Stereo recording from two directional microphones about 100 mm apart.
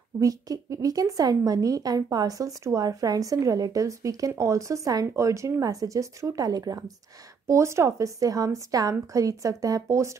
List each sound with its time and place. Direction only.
0.2 s a woman's voice: 35° right (ahead or behind)